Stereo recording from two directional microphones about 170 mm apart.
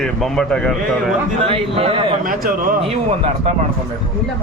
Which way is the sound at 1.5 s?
35° right (ahead or behind).